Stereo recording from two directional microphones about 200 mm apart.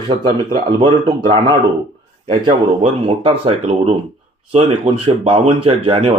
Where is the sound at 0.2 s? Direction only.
20° right (ahead or behind).